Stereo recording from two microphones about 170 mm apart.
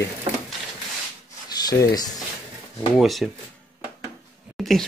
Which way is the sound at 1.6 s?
20° left (ahead or behind).